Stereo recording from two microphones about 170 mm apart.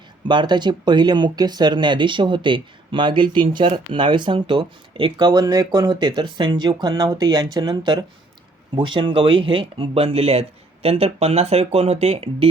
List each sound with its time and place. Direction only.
0.3 s speech: 25° right (ahead or behind)